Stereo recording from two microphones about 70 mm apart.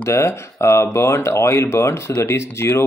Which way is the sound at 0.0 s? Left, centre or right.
Left.